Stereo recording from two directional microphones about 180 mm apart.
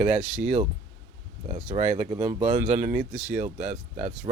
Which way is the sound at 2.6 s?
40° right (ahead or behind).